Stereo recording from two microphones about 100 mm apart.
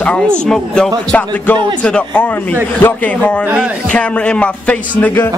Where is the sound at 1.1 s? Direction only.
15° left (ahead or behind).